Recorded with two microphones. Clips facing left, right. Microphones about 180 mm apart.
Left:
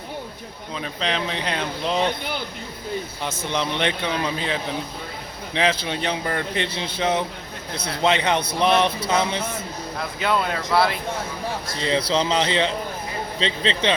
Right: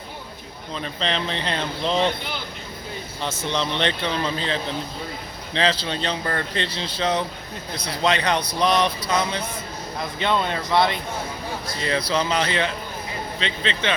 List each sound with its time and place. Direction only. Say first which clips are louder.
0.8 s speech: even; 5° left (ahead or behind)
3.5 s a man's voice: left 1 dB; 10° left (ahead or behind)
10.2 s speech: even; 5° left (ahead or behind)
11.8 s a man's voice: left 2 dB; 25° left (ahead or behind)